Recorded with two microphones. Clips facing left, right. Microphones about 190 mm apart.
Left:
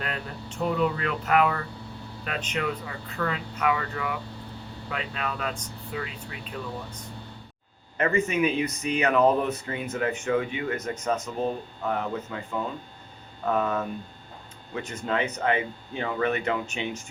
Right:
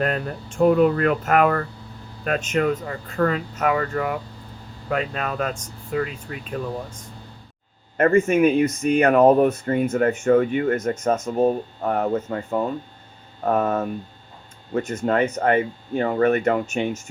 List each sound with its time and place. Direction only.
0.0 s speech: 50° right (ahead or behind)